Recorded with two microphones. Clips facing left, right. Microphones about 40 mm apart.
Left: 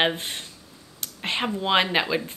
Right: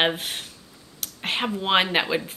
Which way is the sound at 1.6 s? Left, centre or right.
Centre.